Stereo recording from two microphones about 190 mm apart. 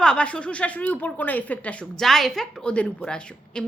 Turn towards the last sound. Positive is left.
turn(degrees=5)  # may be behind; listen again after turning